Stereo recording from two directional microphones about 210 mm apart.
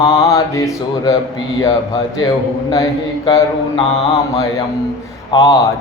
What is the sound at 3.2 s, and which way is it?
Mantra, 20° left (ahead or behind).